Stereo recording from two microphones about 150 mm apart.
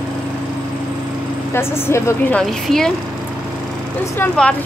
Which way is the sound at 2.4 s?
Centre (ahead or behind).